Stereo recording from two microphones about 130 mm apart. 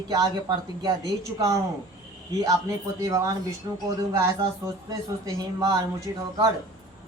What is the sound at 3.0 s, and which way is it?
Speech, 25° right (ahead or behind).